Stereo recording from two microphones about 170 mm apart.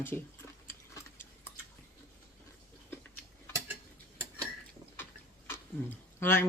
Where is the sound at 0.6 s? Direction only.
15° left (ahead or behind).